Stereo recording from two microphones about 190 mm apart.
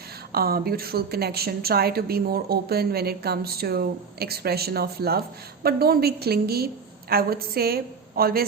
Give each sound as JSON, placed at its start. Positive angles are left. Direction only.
{"t": 0.3, "sound": "a woman's voice", "side_deg": -55}